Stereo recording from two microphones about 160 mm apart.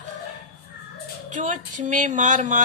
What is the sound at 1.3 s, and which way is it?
A woman's voice, 50° right (ahead or behind).